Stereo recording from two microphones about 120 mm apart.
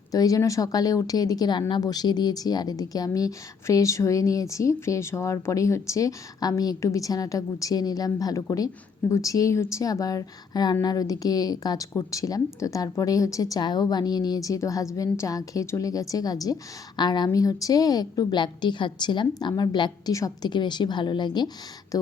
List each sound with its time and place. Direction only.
0.1 s a woman's voice: 30° left (ahead or behind)